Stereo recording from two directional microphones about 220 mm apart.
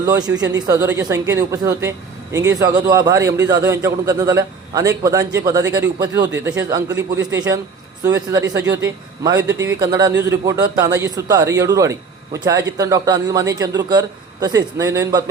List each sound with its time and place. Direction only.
0.0 s a man's voice: 15° right (ahead or behind)